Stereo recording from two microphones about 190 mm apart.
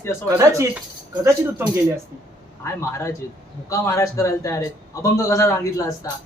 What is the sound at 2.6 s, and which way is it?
A man's voice, 15° left (ahead or behind).